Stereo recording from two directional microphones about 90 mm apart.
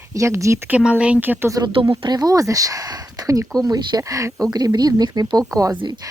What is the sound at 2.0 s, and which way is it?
Speech, 45° right (ahead or behind).